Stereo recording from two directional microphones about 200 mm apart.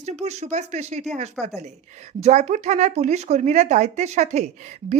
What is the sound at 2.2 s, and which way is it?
Speech, 35° right (ahead or behind).